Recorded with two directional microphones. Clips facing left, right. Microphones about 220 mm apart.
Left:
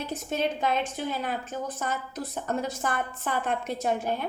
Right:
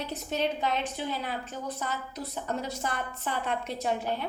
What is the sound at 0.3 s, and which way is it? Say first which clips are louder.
A woman's voice: left 2 dB; 50° left (ahead or behind).